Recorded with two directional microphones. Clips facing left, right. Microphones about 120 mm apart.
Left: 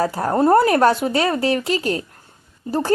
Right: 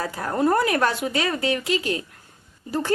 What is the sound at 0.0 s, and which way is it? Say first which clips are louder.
A woman's voice: left 5 dB; 40° left (ahead or behind).